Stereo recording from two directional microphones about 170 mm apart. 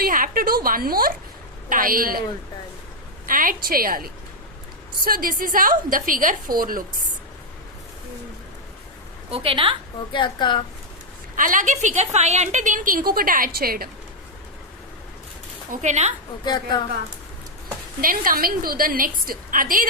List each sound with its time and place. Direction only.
0.0 s a woman's voice: 55° right (ahead or behind)
3.2 s a woman's voice: 55° right (ahead or behind)
9.3 s a woman's voice: 30° right (ahead or behind)
10.1 s a woman's voice: 25° left (ahead or behind)
11.3 s a woman's voice: 50° right (ahead or behind)
15.7 s a woman's voice: 45° right (ahead or behind)
18.0 s a woman's voice: 55° right (ahead or behind)